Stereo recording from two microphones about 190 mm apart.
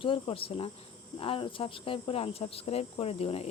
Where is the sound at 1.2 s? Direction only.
30° left (ahead or behind).